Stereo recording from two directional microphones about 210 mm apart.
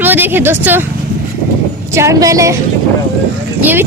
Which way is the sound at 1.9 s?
15° right (ahead or behind).